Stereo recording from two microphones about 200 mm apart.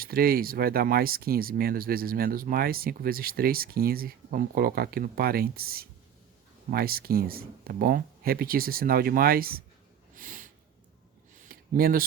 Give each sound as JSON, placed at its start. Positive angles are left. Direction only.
{"t": 0.0, "sound": "speech", "side_deg": -50}
{"t": 10.2, "sound": "snort", "side_deg": -40}
{"t": 11.3, "sound": "a sound", "side_deg": -45}